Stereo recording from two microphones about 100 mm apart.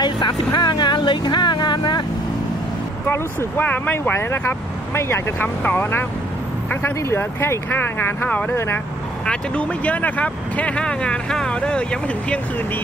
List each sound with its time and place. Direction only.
0.0 s speech: 50° left (ahead or behind)
3.5 s speech: 15° left (ahead or behind)